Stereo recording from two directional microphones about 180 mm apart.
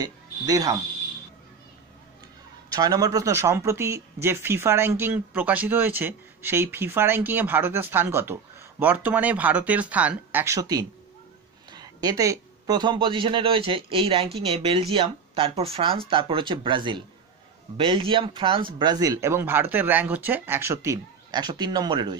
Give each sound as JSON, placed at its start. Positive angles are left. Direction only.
{"t": 0.0, "sound": "speech", "side_deg": -20}
{"t": 2.7, "sound": "speech", "side_deg": -20}